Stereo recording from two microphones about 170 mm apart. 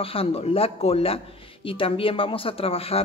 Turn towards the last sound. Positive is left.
turn(degrees=35)  # may be behind; listen again after turning